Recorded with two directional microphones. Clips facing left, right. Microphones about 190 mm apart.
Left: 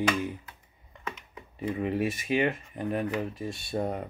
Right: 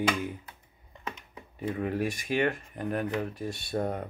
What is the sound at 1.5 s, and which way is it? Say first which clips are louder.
Speech: left 1 dB; centre (ahead or behind).